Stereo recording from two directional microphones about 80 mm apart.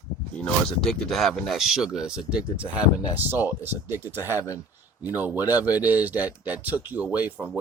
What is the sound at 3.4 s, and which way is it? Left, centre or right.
Speech, right.